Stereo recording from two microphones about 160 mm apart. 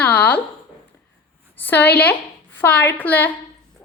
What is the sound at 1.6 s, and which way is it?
A woman's voice, 10° left (ahead or behind).